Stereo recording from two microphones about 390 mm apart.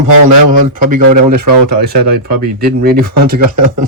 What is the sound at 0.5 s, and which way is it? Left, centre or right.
Speech, right.